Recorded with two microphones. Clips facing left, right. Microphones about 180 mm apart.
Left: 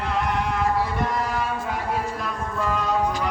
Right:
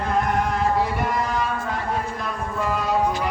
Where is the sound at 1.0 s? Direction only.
Centre (ahead or behind).